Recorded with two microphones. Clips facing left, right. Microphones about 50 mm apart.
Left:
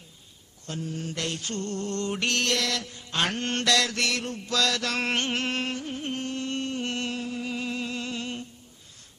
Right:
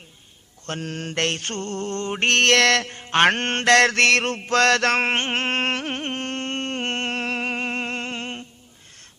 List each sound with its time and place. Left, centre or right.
0.7 s mantra: right
4.4 s mantra: right
5.7 s music: right
6.1 s music: right